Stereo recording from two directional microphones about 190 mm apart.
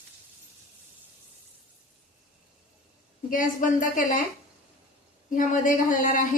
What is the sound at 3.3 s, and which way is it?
Speech, 45° left (ahead or behind).